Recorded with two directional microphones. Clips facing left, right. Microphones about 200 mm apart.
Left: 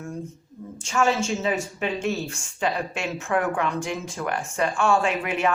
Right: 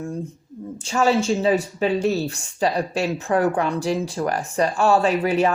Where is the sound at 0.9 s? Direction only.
35° right (ahead or behind).